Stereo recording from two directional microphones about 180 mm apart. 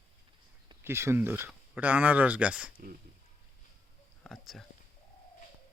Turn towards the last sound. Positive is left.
turn(degrees=0)  # may be behind; listen again after turning